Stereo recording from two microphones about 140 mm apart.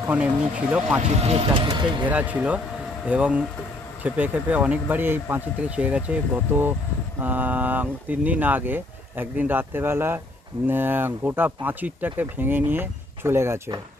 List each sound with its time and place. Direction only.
0.0 s speech: 10° right (ahead or behind)
1.2 s speech: 45° right (ahead or behind)
1.7 s speech: 35° right (ahead or behind)
2.0 s speech: 10° right (ahead or behind)